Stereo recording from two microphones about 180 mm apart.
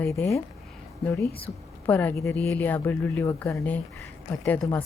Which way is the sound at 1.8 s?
10° left (ahead or behind).